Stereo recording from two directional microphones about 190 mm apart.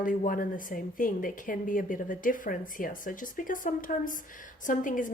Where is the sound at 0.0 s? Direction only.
45° left (ahead or behind).